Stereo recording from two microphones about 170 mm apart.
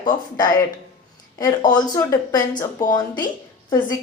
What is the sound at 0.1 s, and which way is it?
A woman's voice, 25° left (ahead or behind).